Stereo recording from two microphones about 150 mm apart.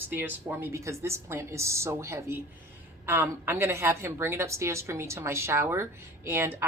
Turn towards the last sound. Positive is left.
turn(degrees=-15)  # may be behind; listen again after turning